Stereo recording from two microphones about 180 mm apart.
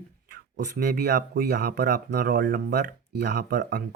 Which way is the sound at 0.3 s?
65° right (ahead or behind).